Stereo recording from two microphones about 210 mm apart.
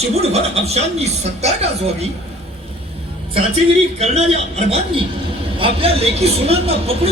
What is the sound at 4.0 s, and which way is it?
A man's voice, 30° right (ahead or behind).